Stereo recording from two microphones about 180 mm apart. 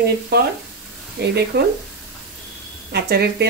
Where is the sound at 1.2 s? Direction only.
65° right (ahead or behind).